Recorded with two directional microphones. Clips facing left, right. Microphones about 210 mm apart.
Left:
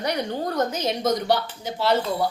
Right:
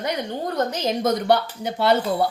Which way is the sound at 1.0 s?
60° right (ahead or behind).